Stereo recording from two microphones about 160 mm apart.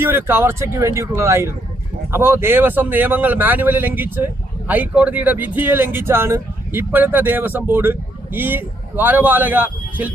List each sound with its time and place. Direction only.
0.0 s speech: 15° right (ahead or behind)